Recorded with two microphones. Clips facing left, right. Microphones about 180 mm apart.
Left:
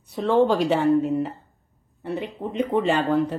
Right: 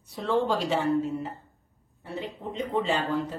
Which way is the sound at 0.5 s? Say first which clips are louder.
Left 6 dB; 60° left (ahead or behind).